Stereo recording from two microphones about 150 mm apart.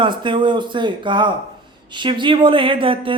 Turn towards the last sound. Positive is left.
turn(degrees=-35)  # may be behind; listen again after turning